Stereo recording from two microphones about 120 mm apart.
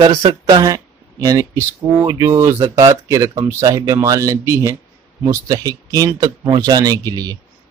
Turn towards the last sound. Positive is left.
turn(degrees=-35)  # may be behind; listen again after turning